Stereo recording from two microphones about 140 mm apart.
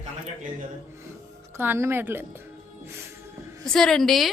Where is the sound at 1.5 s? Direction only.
15° right (ahead or behind).